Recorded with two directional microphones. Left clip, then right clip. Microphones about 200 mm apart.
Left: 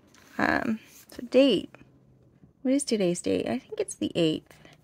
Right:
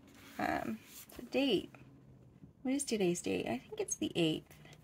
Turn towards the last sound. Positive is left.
turn(degrees=45)  # may be behind; listen again after turning